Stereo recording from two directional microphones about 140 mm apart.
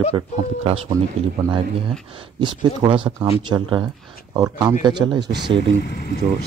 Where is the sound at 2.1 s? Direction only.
35° right (ahead or behind).